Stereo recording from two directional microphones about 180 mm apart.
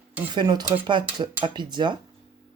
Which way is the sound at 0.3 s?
25° right (ahead or behind).